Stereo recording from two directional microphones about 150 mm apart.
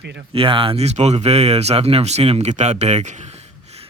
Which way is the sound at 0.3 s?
35° right (ahead or behind).